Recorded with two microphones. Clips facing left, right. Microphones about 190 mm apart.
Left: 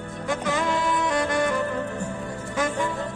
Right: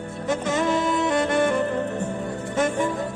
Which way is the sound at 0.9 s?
25° right (ahead or behind).